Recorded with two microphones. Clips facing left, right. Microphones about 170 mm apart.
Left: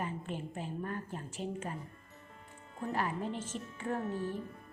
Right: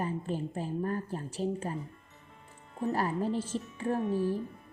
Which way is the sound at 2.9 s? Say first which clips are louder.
Right 5 dB; 35° right (ahead or behind).